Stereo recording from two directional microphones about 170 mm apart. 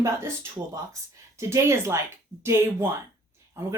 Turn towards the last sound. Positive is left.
turn(degrees=-15)  # may be behind; listen again after turning